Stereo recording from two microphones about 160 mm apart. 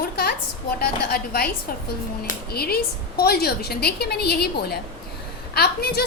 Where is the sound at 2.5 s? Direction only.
75° left (ahead or behind).